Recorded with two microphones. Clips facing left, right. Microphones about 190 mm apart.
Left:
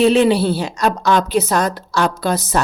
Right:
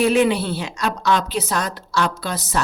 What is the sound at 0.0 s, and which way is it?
A woman's voice, 30° left (ahead or behind).